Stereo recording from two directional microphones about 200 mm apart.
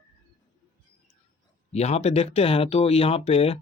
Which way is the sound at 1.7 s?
30° left (ahead or behind).